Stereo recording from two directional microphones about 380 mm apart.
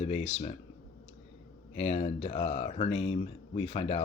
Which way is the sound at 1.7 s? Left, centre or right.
Centre.